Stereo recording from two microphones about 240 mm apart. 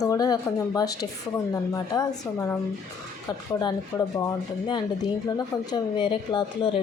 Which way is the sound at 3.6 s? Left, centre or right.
Centre.